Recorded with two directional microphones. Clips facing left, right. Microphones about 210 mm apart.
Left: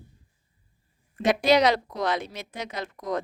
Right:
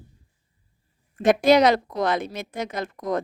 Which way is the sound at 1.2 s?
50° right (ahead or behind).